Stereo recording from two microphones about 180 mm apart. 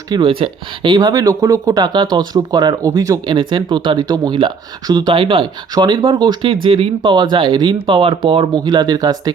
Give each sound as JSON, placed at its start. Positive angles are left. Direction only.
{"t": 0.1, "sound": "speech", "side_deg": -25}